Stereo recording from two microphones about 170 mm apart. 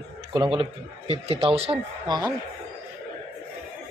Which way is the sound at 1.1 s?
35° right (ahead or behind).